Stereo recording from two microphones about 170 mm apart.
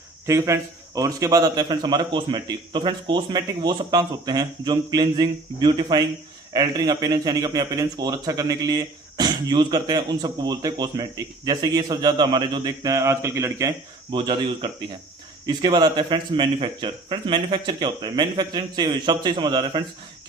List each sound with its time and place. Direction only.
0.3 s speech: 15° right (ahead or behind)
14.2 s speech: 30° right (ahead or behind)